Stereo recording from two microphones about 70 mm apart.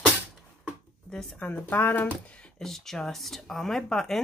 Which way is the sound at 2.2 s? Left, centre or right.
Centre.